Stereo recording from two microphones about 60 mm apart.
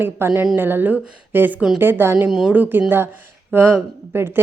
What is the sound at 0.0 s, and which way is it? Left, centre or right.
A woman's voice, right.